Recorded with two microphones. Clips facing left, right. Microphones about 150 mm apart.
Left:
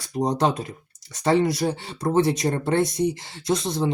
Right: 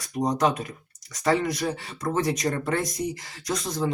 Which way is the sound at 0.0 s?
30° left (ahead or behind).